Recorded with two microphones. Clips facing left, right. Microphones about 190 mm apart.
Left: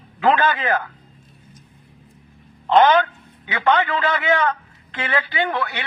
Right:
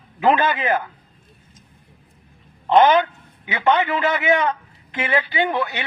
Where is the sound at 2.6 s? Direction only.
15° right (ahead or behind).